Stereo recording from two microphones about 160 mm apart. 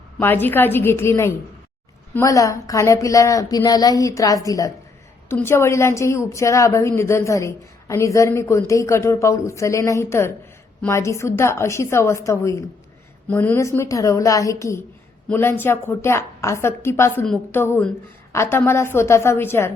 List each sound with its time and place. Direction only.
0.2 s a woman's voice: 10° left (ahead or behind)